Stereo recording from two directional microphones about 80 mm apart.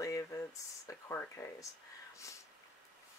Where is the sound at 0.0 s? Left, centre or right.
Left.